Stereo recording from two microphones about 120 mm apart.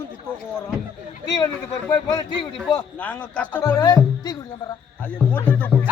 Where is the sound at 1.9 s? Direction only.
35° left (ahead or behind).